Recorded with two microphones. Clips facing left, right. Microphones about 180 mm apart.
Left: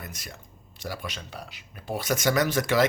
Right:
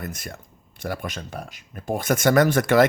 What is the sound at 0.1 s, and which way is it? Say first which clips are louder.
Speech: right 7 dB; 50° right (ahead or behind).